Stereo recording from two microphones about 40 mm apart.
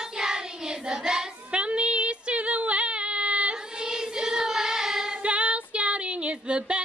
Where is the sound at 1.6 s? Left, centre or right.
Right.